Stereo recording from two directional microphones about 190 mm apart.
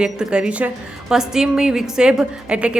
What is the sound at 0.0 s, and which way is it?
A woman's voice, 5° right (ahead or behind).